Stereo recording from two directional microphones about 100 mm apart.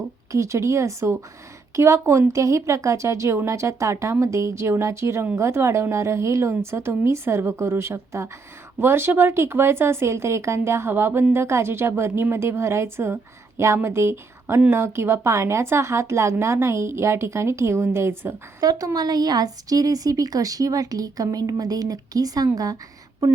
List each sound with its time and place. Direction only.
0.3 s speech: 30° right (ahead or behind)
18.6 s speech: 40° right (ahead or behind)